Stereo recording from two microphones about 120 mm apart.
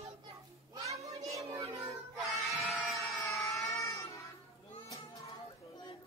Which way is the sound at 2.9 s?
25° left (ahead or behind).